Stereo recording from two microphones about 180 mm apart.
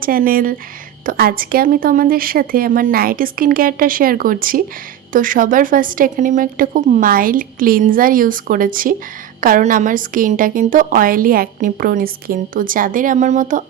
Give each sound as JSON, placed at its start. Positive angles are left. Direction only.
{"t": 0.0, "sound": "a woman's voice", "side_deg": -55}